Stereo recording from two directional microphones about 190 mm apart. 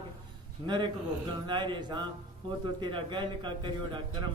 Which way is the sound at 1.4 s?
25° right (ahead or behind).